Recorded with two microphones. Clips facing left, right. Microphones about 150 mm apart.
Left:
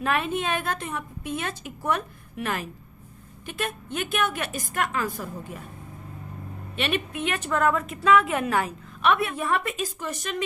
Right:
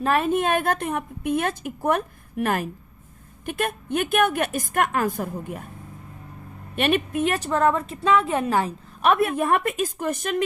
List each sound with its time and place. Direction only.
0.0 s a woman's voice: 40° right (ahead or behind); by 5.6 s 55° right (ahead or behind)
6.7 s a woman's voice: 45° right (ahead or behind); by 8.7 s 30° right (ahead or behind)
9.0 s a woman's voice: 45° right (ahead or behind)